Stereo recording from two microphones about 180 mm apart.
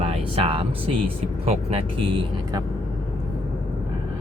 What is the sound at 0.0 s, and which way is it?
Speech, 30° right (ahead or behind).